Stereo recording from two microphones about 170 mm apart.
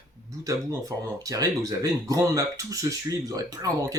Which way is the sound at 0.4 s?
20° right (ahead or behind).